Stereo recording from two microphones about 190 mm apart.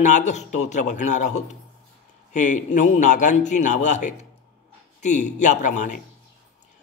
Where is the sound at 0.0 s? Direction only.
40° left (ahead or behind).